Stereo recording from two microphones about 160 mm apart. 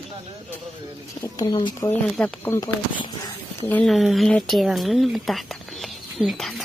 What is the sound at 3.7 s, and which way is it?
Speech, 5° left (ahead or behind).